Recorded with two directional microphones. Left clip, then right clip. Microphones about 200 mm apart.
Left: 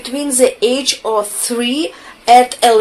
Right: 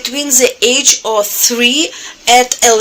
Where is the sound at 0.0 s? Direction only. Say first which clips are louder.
Right 1 dB; 30° right (ahead or behind).